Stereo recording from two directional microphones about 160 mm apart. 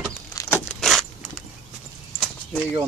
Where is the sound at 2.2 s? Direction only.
Centre (ahead or behind).